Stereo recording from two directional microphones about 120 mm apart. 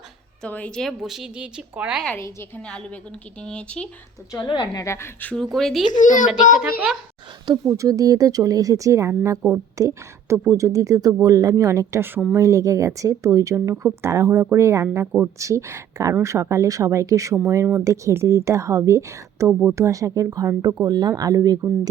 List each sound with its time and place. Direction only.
0.4 s speech: 10° left (ahead or behind); by 2.0 s 10° right (ahead or behind)
2.1 s speech: 20° left (ahead or behind)
2.6 s speech: 10° left (ahead or behind)
4.3 s a woman's voice: 40° left (ahead or behind)
4.8 s speech: 20° left (ahead or behind)
5.3 s speech: 5° left (ahead or behind)
5.9 s a child's voice: 90° left
7.4 s speech: 40° right (ahead or behind)
15.0 s speech: 15° right (ahead or behind)
15.4 s speech: 25° right (ahead or behind)